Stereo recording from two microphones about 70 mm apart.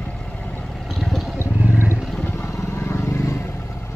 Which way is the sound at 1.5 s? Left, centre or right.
Right.